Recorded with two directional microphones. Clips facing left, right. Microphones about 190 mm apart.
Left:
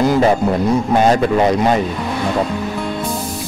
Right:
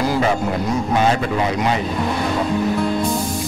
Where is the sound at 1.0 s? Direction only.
40° left (ahead or behind).